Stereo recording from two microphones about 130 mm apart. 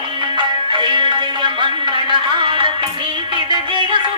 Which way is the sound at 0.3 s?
40° right (ahead or behind).